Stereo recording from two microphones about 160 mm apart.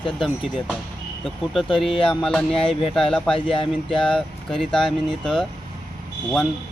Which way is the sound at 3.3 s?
35° left (ahead or behind).